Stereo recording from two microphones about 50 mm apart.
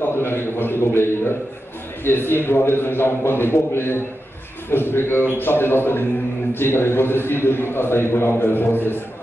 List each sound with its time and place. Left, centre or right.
0.0 s a man's voice: left